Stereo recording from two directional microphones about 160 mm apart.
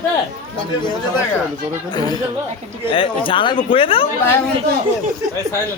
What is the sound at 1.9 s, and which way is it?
Speech, 25° left (ahead or behind).